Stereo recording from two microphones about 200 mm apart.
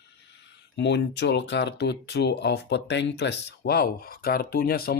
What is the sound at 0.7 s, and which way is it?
Speech, 60° left (ahead or behind).